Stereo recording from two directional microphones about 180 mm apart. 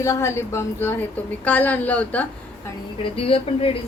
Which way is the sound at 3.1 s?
30° left (ahead or behind).